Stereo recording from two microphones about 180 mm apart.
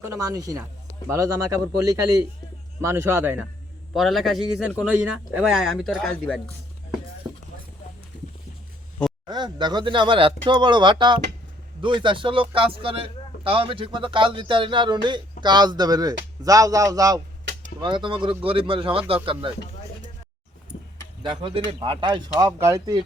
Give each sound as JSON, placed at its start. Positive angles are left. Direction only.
{"t": 0.0, "sound": "speech", "side_deg": -20}
{"t": 3.9, "sound": "a man's voice", "side_deg": 0}
{"t": 9.2, "sound": "a man's voice", "side_deg": -25}
{"t": 21.2, "sound": "a man's voice", "side_deg": -30}